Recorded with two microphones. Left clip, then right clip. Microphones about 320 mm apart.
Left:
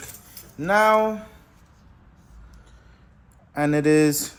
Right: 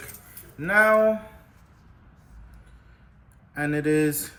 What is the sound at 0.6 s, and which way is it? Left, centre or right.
Speech, centre.